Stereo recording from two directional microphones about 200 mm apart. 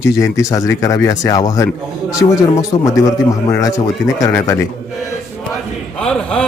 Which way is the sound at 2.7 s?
20° left (ahead or behind).